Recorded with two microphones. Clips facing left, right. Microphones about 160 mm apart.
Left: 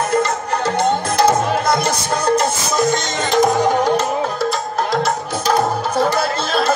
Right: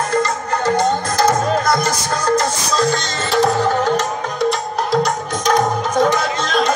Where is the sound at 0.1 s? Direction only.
25° left (ahead or behind).